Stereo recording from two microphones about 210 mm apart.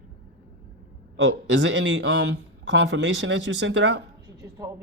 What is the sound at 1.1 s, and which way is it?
Speech, 60° right (ahead or behind).